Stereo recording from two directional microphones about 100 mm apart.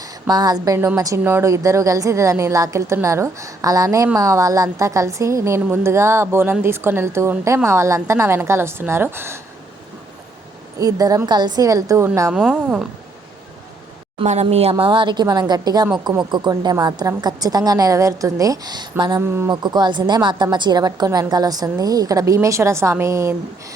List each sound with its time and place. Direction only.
0.0 s a woman's voice: 40° right (ahead or behind); by 9.4 s 25° right (ahead or behind)
10.8 s a woman's voice: 40° right (ahead or behind)
12.3 s speech: 10° right (ahead or behind)
14.2 s speech: 75° right (ahead or behind)
14.8 s a woman's voice: 50° right (ahead or behind)
19.2 s a woman's voice: 25° right (ahead or behind)
19.5 s a woman's voice: 45° right (ahead or behind); by 23.7 s 30° right (ahead or behind)